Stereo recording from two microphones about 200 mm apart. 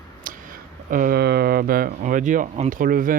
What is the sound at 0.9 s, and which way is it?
Speech, 45° right (ahead or behind).